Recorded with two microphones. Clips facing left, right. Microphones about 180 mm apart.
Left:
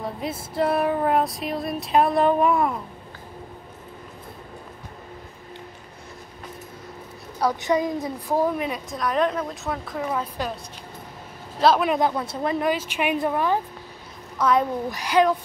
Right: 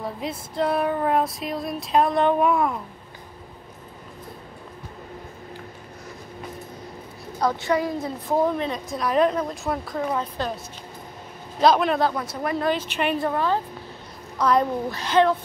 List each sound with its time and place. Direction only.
0.0 s female singing: centre (ahead or behind)
7.3 s a woman's voice: 15° left (ahead or behind)
8.9 s female singing: centre (ahead or behind)
11.6 s female singing: 5° left (ahead or behind)
11.9 s speech: 20° left (ahead or behind)
12.6 s a woman's voice: 10° left (ahead or behind)
14.4 s female singing: centre (ahead or behind)
14.9 s a woman's voice: 15° left (ahead or behind)